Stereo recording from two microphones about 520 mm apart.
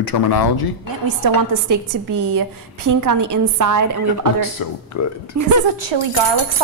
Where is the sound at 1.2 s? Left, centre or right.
Right.